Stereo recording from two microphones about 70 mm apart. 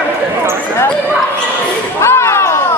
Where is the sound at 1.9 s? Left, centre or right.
Left.